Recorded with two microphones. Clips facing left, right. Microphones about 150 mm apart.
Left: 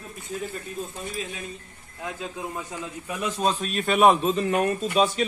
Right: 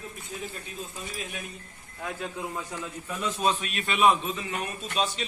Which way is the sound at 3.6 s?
45° left (ahead or behind).